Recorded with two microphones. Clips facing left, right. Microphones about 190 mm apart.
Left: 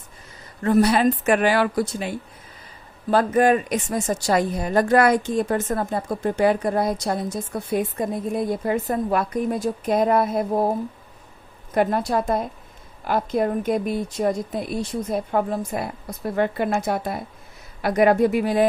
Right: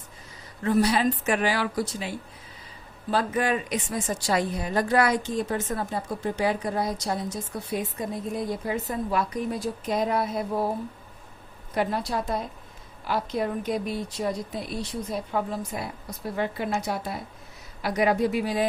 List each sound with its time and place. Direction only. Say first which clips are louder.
0.6 s a woman's voice: left 5 dB; 55° left (ahead or behind)